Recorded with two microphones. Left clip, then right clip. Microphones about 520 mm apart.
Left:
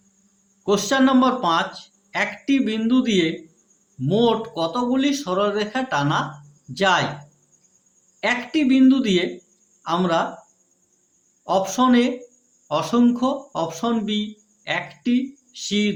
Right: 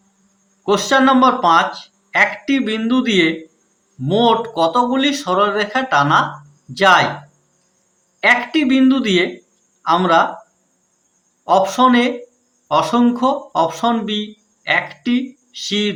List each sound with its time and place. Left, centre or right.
0.6 s speech: left
8.2 s speech: left
11.4 s speech: left